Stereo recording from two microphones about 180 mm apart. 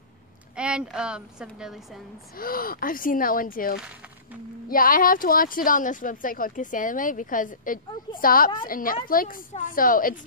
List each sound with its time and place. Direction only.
0.6 s speech: 5° right (ahead or behind)
2.3 s speech: 55° left (ahead or behind)